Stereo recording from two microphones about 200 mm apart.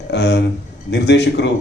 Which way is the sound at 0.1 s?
60° left (ahead or behind).